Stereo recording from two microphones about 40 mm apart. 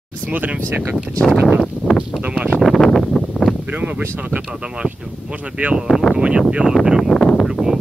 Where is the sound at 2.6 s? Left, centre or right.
Centre.